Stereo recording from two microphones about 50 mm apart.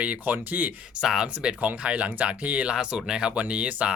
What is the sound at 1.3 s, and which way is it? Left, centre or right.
Speech, right.